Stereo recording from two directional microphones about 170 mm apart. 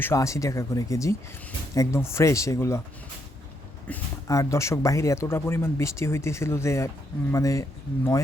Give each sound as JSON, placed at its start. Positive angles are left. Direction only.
{"t": 0.0, "sound": "speech", "side_deg": 15}
{"t": 3.9, "sound": "speech", "side_deg": 10}